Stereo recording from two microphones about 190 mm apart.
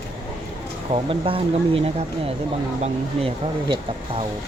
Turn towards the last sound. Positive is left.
turn(degrees=-30)  # may be behind; listen again after turning